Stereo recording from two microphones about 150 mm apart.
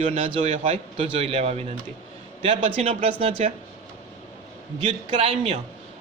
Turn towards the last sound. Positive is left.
turn(degrees=-40)  # may be behind; listen again after turning